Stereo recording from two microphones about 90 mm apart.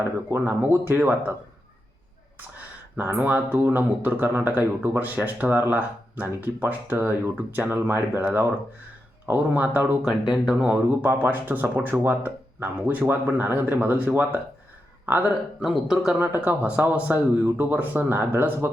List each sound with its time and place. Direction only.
0.3 s a man's voice: 25° right (ahead or behind)
3.0 s a man's voice: 20° right (ahead or behind)
10.0 s a man's voice: 5° right (ahead or behind); by 14.4 s 20° right (ahead or behind)
15.6 s speech: 5° right (ahead or behind)
16.2 s a man's voice: 20° right (ahead or behind)